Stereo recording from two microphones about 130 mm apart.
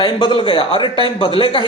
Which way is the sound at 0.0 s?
35° left (ahead or behind).